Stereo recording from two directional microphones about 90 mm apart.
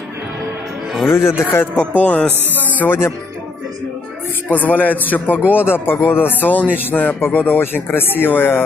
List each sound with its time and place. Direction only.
1.0 s speech: 25° left (ahead or behind)
1.8 s a man's voice: 15° left (ahead or behind)
4.5 s speech: 20° left (ahead or behind)